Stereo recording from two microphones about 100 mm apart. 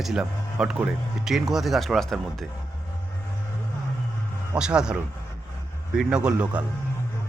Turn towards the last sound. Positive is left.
turn(degrees=-10)  # may be behind; listen again after turning